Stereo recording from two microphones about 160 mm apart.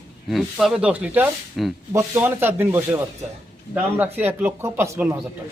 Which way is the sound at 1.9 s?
15° right (ahead or behind).